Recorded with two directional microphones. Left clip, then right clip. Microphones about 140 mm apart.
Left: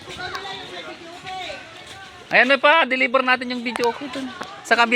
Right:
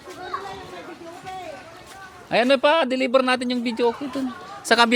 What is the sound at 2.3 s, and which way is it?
Speech, 90° right.